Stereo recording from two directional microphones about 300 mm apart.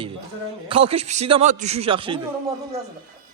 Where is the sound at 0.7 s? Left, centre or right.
Centre.